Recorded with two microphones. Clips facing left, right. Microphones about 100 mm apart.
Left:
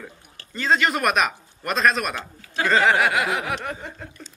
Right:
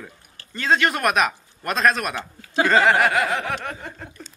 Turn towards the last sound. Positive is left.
turn(degrees=0)  # may be behind; listen again after turning